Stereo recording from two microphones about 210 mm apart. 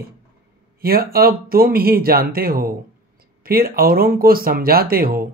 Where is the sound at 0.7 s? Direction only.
45° right (ahead or behind).